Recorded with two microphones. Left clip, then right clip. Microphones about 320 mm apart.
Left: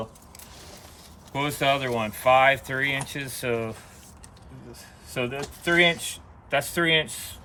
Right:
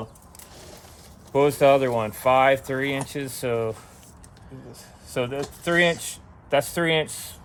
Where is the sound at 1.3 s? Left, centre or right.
Right.